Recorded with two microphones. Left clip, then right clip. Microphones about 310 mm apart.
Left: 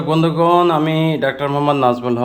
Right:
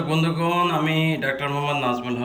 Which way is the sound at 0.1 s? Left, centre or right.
Centre.